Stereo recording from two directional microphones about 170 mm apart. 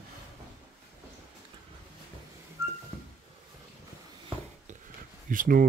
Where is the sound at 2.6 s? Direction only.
15° right (ahead or behind).